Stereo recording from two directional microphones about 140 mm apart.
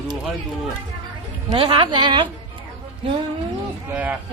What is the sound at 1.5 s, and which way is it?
Speech, 35° right (ahead or behind).